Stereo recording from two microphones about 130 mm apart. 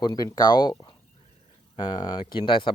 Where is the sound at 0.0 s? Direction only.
30° left (ahead or behind).